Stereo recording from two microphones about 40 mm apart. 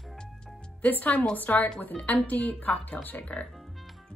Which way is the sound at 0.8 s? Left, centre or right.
Left.